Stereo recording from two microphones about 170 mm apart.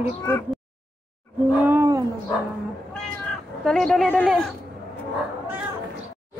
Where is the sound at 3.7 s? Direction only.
Centre (ahead or behind).